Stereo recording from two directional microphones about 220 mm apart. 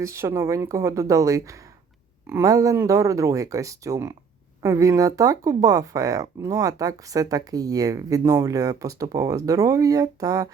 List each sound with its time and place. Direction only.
0.0 s speech: 15° right (ahead or behind)